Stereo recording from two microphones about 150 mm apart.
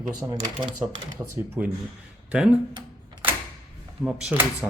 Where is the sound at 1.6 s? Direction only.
10° right (ahead or behind).